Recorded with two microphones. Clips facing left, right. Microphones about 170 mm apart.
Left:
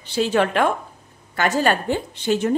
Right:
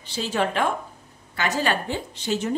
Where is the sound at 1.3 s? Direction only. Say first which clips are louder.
Left 5 dB; 50° left (ahead or behind).